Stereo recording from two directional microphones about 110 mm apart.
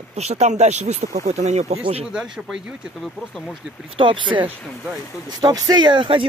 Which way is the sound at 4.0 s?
50° right (ahead or behind).